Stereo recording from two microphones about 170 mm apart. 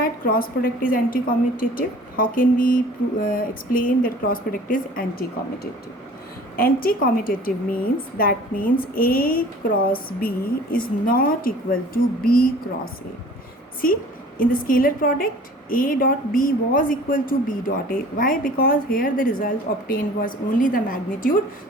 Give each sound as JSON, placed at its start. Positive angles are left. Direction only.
{"t": 0.0, "sound": "speech", "side_deg": 55}
{"t": 6.6, "sound": "speech", "side_deg": 55}
{"t": 14.3, "sound": "speech", "side_deg": 55}